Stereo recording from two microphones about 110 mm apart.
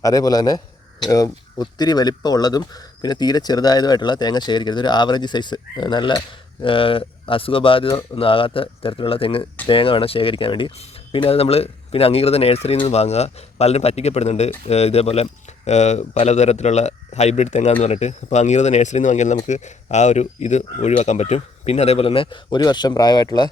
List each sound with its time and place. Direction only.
0.0 s a man's voice: 35° left (ahead or behind); by 12.9 s 60° left (ahead or behind)
12.9 s speech: 75° left (ahead or behind)
14.7 s speech: 75° left (ahead or behind); by 23.5 s 40° left (ahead or behind)